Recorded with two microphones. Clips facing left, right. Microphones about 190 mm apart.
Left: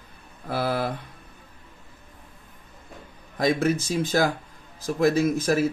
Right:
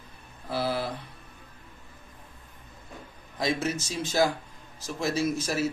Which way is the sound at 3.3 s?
50° left (ahead or behind).